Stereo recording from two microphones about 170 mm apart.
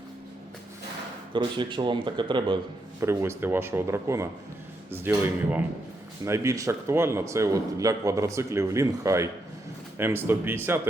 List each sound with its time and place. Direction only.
1.3 s speech: 30° right (ahead or behind)
3.0 s a man's voice: 15° right (ahead or behind)